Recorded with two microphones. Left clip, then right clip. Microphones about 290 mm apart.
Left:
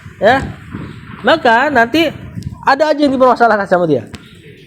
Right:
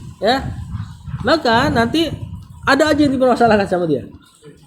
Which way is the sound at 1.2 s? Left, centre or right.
Centre.